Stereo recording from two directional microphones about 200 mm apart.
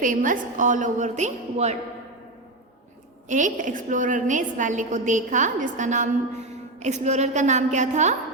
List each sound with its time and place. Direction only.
0.0 s a woman's voice: 40° right (ahead or behind)
3.2 s a woman's voice: 40° right (ahead or behind)